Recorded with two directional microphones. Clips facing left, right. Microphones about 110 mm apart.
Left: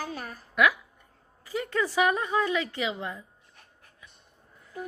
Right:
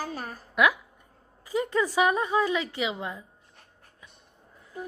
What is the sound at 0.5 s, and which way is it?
A woman's voice, 15° right (ahead or behind).